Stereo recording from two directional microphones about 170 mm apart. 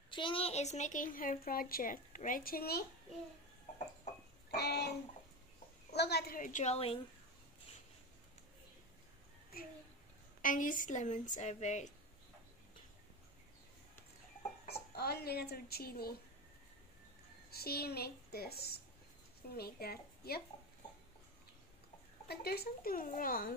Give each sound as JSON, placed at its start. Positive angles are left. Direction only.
{"t": 0.1, "sound": "a woman's voice", "side_deg": 30}
{"t": 4.5, "sound": "a sound", "side_deg": 75}
{"t": 5.9, "sound": "a woman's voice", "side_deg": 75}
{"t": 10.4, "sound": "a woman's voice", "side_deg": 50}
{"t": 14.7, "sound": "speech", "side_deg": 70}
{"t": 17.5, "sound": "speech", "side_deg": 65}
{"t": 22.3, "sound": "speech", "side_deg": 65}